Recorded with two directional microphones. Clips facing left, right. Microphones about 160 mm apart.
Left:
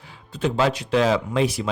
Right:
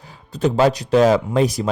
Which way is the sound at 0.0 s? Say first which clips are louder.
Right 5 dB; 40° right (ahead or behind).